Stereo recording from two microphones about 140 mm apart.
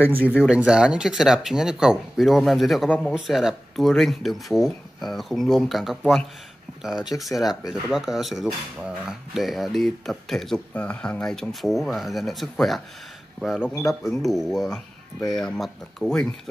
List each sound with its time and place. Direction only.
0.4 s speech: 5° right (ahead or behind)
2.9 s speech: 10° left (ahead or behind)
3.3 s speech: centre (ahead or behind)